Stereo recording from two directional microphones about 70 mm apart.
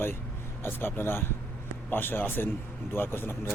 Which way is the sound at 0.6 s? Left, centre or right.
Left.